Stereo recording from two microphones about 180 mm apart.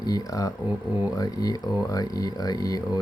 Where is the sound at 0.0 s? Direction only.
20° left (ahead or behind).